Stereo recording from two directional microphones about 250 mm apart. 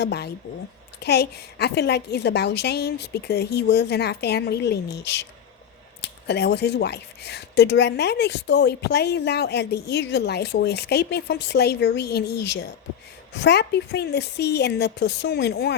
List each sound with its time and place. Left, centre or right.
0.0 s speech: left